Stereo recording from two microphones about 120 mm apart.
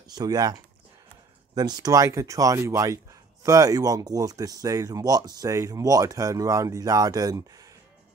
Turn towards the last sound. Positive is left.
turn(degrees=-30)  # may be behind; listen again after turning